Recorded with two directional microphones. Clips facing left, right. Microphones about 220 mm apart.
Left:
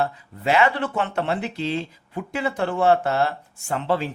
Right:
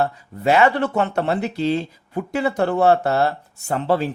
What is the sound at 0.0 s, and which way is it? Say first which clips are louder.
Speech: right 4 dB; 40° right (ahead or behind).